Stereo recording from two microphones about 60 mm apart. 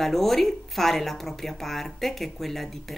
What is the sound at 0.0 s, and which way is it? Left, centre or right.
Speech, centre.